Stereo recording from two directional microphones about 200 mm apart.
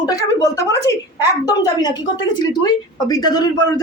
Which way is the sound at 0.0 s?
15° left (ahead or behind).